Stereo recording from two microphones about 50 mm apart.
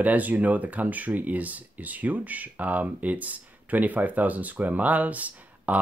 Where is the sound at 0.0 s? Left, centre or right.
Right.